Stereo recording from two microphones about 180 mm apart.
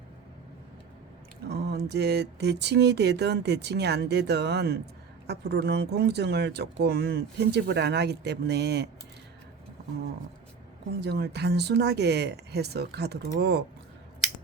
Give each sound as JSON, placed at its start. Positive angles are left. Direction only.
{"t": 1.5, "sound": "speech", "side_deg": -65}
{"t": 11.0, "sound": "speech", "side_deg": -65}